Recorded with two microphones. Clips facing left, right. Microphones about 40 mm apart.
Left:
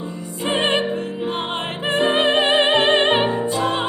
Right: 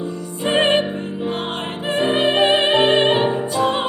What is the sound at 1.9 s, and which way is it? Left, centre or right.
Music, centre.